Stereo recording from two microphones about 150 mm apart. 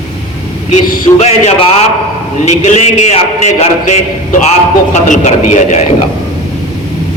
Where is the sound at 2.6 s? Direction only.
50° left (ahead or behind).